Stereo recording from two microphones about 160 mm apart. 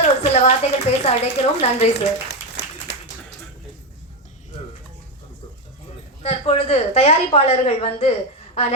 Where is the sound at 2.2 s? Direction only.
90° left.